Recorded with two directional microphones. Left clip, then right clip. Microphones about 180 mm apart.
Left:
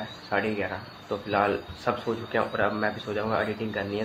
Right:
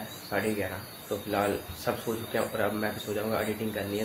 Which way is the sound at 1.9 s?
5° right (ahead or behind).